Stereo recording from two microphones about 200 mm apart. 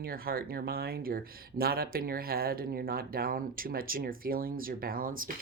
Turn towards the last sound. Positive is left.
turn(degrees=-45)  # may be behind; listen again after turning